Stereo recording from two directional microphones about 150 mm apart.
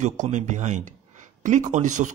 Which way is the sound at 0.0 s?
55° right (ahead or behind).